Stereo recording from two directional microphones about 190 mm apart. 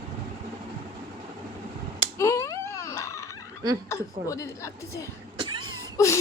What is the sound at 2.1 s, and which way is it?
Baby cry, 15° left (ahead or behind).